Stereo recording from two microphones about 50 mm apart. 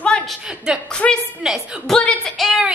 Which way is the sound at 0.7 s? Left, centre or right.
Centre.